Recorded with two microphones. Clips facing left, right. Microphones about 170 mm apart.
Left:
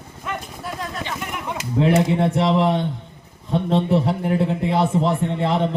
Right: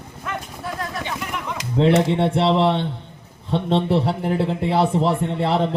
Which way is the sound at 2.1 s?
30° right (ahead or behind).